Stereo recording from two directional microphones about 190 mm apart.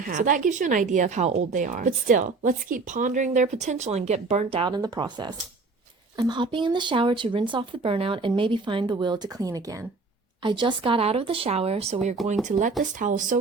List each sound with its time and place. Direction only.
0.0 s a woman's voice: 45° right (ahead or behind)